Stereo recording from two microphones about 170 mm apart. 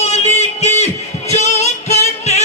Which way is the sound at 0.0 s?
40° left (ahead or behind).